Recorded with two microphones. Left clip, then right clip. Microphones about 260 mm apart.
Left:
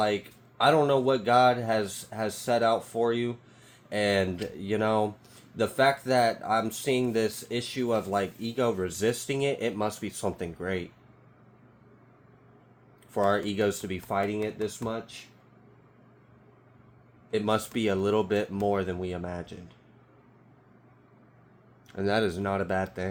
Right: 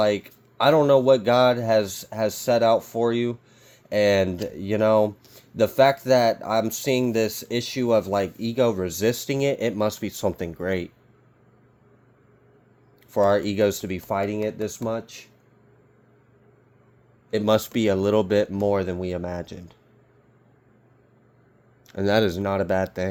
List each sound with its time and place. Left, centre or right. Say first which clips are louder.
0.6 s speech: right 5 dB; right
13.1 s speech: right 6 dB; right
17.3 s speech: right 6 dB; right
21.8 s speech: right 6 dB; right